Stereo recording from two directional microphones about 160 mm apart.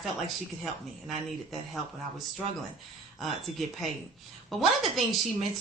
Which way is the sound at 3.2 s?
Centre (ahead or behind).